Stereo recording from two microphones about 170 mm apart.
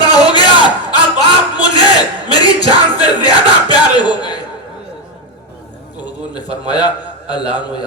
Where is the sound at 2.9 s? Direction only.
25° left (ahead or behind).